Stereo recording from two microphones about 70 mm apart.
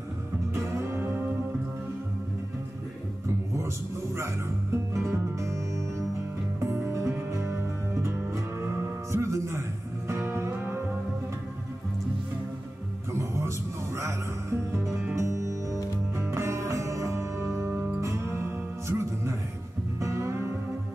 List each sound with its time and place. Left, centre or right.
0.9 s music: right
4.9 s music: right
13.9 s music: right